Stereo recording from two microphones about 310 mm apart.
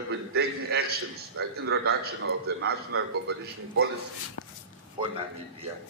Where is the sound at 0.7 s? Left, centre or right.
Right.